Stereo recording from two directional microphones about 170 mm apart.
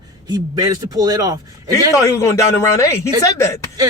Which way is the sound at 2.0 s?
15° left (ahead or behind).